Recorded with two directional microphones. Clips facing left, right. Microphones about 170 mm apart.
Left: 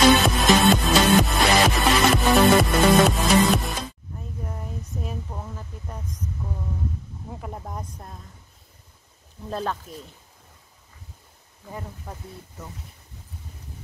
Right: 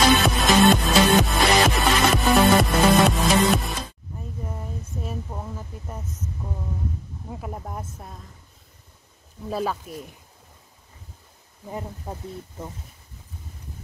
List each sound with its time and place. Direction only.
0.1 s music: centre (ahead or behind)
5.0 s speech: 10° right (ahead or behind)
7.2 s speech: 5° right (ahead or behind)
9.5 s speech: 5° right (ahead or behind)
11.6 s speech: 20° right (ahead or behind)